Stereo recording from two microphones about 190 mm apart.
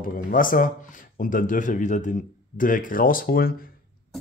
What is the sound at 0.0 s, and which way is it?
Speech, 45° left (ahead or behind).